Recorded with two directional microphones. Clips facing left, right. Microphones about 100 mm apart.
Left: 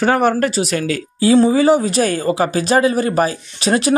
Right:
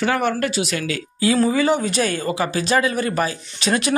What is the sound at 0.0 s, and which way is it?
Speech, 40° left (ahead or behind).